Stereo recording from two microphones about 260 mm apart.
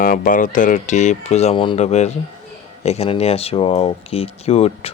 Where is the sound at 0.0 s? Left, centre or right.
Left.